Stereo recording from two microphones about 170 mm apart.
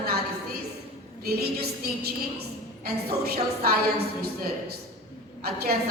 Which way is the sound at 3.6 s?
65° right (ahead or behind).